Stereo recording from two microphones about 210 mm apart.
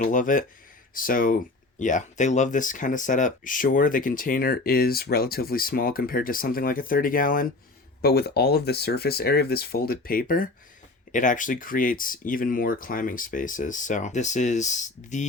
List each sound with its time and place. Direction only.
0.0 s speech: 40° left (ahead or behind)